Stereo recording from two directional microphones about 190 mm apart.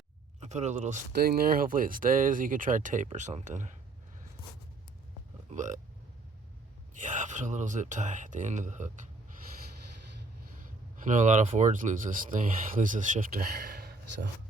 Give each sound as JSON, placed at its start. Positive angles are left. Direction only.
{"t": 0.3, "sound": "speech", "side_deg": -40}
{"t": 1.1, "sound": "speech", "side_deg": -55}
{"t": 5.5, "sound": "speech", "side_deg": -40}
{"t": 6.9, "sound": "speech", "side_deg": -40}
{"t": 10.6, "sound": "speech", "side_deg": -40}